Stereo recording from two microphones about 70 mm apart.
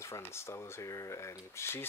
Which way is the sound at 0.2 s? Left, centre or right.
Left.